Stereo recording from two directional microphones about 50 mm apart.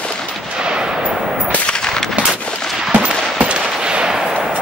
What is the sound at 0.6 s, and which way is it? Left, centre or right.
Gunshot, centre.